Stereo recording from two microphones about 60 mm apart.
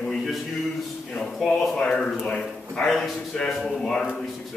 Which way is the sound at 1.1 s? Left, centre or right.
Centre.